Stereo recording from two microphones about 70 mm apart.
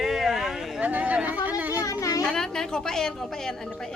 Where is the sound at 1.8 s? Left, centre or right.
Left.